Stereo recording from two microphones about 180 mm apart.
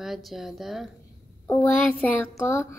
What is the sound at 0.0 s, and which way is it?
Speech, centre (ahead or behind).